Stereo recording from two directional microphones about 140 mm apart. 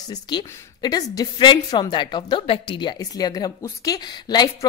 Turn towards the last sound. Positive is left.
turn(degrees=30)  # may be behind; listen again after turning